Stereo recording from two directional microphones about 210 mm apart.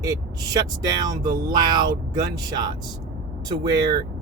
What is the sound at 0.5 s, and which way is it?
Speech, 20° right (ahead or behind).